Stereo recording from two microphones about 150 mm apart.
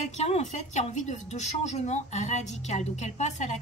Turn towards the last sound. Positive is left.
turn(degrees=50)  # may be behind; listen again after turning